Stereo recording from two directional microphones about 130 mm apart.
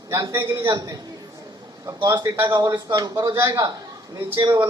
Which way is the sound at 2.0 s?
25° right (ahead or behind).